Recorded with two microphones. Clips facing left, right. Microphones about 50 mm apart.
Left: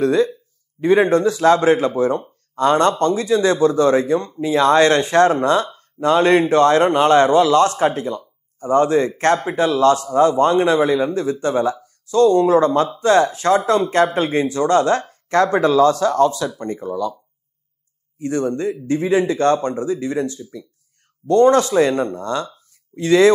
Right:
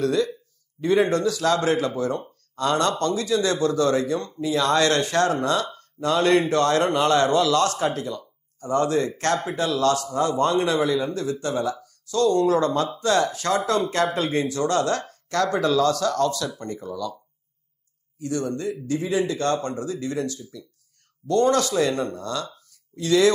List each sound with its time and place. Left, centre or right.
0.0 s a man's voice: left
18.2 s a man's voice: left